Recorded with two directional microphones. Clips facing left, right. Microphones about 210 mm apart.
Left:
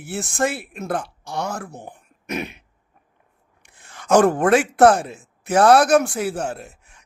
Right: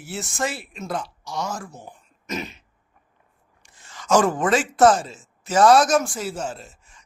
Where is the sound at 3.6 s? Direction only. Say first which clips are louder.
Left 2 dB; 60° left (ahead or behind).